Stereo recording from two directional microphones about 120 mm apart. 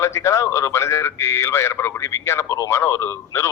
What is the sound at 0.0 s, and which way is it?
A man's voice, 25° left (ahead or behind).